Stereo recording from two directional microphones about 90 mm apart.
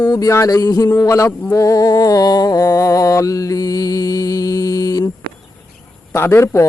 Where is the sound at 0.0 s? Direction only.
45° left (ahead or behind).